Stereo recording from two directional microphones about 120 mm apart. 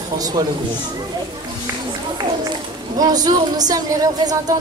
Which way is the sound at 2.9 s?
35° right (ahead or behind).